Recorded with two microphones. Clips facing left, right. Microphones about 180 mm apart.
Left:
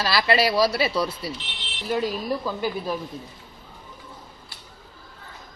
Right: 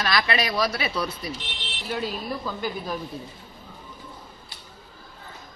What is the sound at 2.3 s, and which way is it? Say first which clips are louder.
Speech: left 4 dB; 10° left (ahead or behind).